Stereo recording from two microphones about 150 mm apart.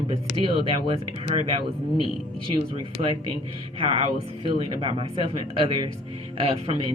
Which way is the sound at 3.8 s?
40° right (ahead or behind).